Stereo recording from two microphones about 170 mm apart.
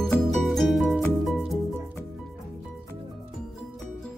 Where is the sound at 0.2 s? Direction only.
Centre (ahead or behind).